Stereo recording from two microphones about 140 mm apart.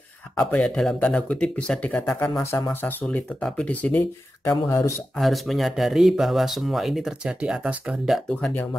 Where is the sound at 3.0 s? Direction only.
5° left (ahead or behind).